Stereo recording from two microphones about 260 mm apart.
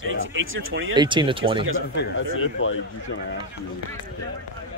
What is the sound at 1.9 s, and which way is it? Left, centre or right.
Speech, left.